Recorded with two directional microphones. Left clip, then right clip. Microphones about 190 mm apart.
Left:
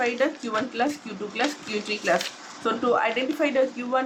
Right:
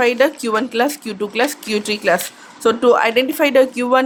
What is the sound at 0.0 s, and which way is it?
Speech, 60° right (ahead or behind).